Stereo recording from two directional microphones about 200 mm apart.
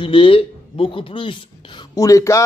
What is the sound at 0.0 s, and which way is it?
A woman's voice, 25° left (ahead or behind).